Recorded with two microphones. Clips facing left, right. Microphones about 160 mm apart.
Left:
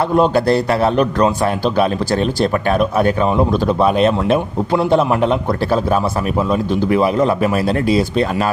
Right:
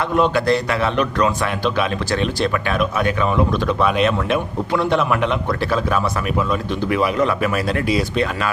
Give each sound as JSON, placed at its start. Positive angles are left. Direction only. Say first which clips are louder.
{"t": 0.0, "sound": "a man's voice", "louder": "left 4 dB", "side_deg": 35}